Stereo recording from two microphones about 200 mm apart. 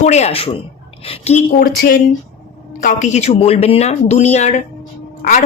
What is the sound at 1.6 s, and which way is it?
Speech, 50° left (ahead or behind).